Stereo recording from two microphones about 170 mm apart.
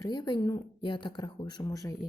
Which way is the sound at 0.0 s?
25° left (ahead or behind).